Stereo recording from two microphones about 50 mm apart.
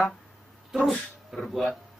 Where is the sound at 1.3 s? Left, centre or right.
Centre.